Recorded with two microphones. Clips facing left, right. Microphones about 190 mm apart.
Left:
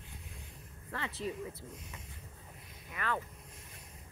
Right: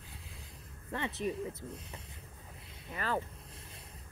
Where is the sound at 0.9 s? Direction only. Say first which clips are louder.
Right 4 dB; 20° right (ahead or behind).